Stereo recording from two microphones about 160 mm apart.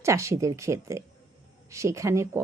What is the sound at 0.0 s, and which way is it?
Speech, 20° right (ahead or behind).